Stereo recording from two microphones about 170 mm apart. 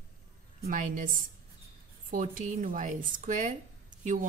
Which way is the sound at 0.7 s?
55° right (ahead or behind).